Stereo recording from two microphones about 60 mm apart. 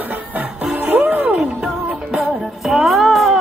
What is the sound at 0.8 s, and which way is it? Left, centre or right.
Music, right.